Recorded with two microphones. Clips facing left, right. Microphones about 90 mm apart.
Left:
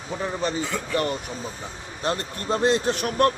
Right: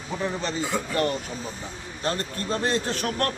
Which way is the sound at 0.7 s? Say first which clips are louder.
Right 2 dB; 15° right (ahead or behind).